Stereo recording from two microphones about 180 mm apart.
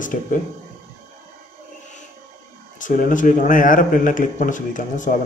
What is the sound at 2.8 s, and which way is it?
Speech, 45° left (ahead or behind).